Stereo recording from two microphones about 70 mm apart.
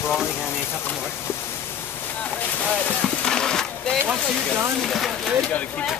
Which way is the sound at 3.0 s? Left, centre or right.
Centre.